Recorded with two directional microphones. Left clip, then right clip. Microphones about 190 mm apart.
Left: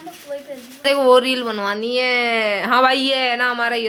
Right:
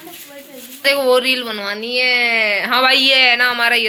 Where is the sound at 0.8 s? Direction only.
35° left (ahead or behind).